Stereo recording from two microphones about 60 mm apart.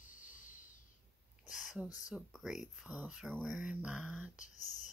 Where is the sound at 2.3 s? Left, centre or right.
Centre.